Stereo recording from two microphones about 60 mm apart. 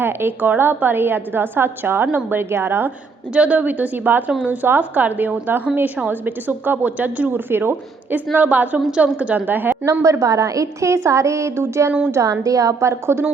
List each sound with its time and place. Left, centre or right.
0.0 s a woman's voice: right
3.3 s a woman's voice: right
8.3 s a woman's voice: right
9.8 s a woman's voice: right
12.1 s a woman's voice: right